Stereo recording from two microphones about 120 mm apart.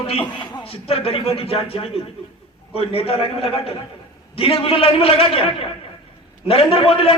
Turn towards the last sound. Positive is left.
turn(degrees=50)  # may be behind; listen again after turning